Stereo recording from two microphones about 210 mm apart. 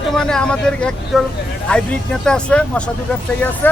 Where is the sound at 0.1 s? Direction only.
5° left (ahead or behind).